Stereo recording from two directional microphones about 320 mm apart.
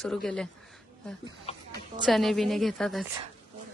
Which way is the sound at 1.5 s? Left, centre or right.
Centre.